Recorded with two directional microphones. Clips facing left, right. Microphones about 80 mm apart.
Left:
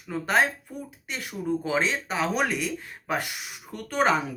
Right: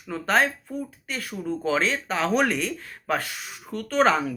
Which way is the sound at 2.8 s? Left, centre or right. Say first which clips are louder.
Right 2 dB; centre.